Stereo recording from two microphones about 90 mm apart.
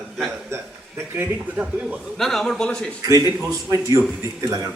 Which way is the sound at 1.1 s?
20° right (ahead or behind).